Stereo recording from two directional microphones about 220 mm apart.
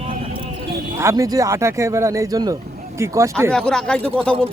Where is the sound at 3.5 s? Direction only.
5° left (ahead or behind).